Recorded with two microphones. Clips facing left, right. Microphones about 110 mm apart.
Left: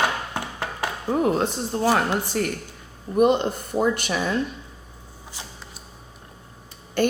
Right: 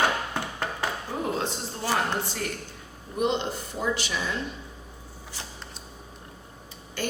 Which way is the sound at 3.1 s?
50° left (ahead or behind).